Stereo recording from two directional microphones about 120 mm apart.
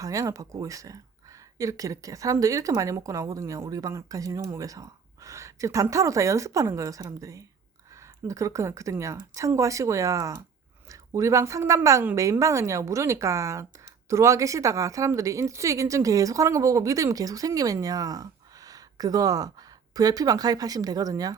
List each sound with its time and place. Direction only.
0.0 s speech: 25° right (ahead or behind)